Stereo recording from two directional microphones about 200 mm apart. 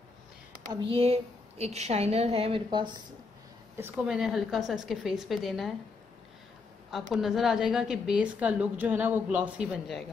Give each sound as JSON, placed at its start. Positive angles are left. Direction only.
{"t": 0.8, "sound": "a woman's voice", "side_deg": -30}
{"t": 3.7, "sound": "a woman's voice", "side_deg": -10}
{"t": 6.9, "sound": "a woman's voice", "side_deg": 0}